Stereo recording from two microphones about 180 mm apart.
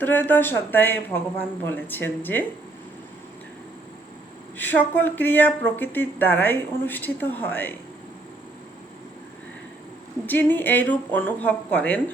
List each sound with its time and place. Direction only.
0.0 s speech: 10° left (ahead or behind)
4.5 s speech: 10° left (ahead or behind)
10.2 s speech: 10° left (ahead or behind)